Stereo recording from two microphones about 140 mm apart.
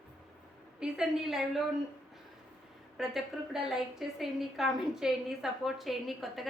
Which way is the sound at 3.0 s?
Centre (ahead or behind).